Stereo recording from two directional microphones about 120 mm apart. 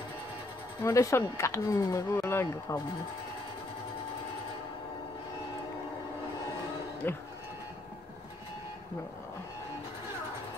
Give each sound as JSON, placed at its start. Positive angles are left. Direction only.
{"t": 0.8, "sound": "speech", "side_deg": 25}
{"t": 7.0, "sound": "speech", "side_deg": 15}